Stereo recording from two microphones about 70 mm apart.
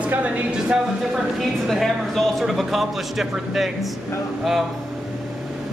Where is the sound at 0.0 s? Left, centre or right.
Centre.